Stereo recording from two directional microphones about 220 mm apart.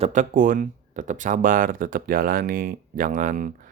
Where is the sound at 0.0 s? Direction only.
35° right (ahead or behind).